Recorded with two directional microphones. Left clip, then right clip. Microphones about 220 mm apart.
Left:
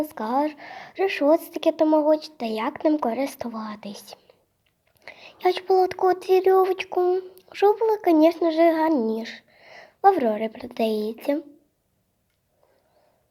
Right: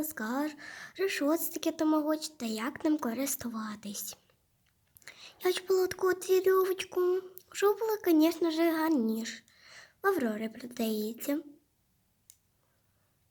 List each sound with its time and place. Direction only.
0.0 s a child's voice: 20° right (ahead or behind)